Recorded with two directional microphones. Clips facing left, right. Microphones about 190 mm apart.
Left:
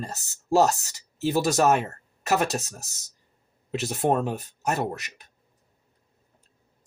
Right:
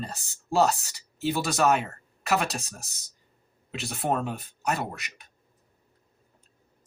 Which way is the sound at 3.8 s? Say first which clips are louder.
Left 4 dB; 40° left (ahead or behind).